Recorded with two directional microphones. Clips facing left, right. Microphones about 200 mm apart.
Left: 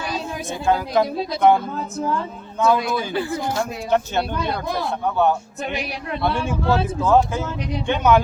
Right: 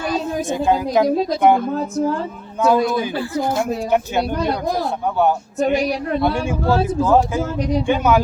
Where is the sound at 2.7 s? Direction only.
40° right (ahead or behind).